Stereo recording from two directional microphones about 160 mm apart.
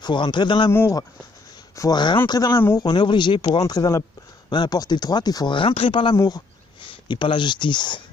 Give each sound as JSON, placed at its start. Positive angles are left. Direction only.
{"t": 0.0, "sound": "speech", "side_deg": 30}
{"t": 0.7, "sound": "speech", "side_deg": 15}